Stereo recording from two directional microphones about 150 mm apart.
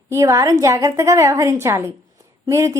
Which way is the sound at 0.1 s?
20° right (ahead or behind).